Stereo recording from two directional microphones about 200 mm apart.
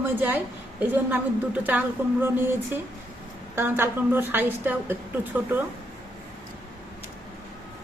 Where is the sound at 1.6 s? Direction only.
10° right (ahead or behind).